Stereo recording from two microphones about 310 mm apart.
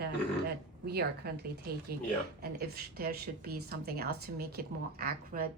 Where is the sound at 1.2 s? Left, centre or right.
Right.